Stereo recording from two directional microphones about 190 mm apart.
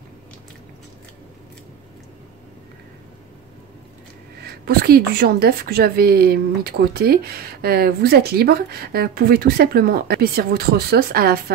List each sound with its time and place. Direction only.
4.6 s a woman's voice: 55° right (ahead or behind)